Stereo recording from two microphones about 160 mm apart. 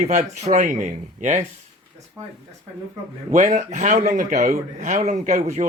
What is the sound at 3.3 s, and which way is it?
Speech, 50° right (ahead or behind).